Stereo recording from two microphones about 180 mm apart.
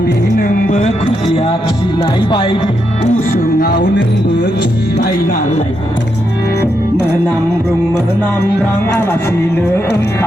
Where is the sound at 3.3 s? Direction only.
60° left (ahead or behind).